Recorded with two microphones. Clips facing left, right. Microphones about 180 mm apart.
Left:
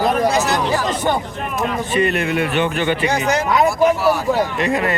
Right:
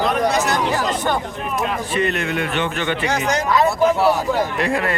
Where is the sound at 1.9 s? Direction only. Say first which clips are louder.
Left 4 dB; 10° left (ahead or behind).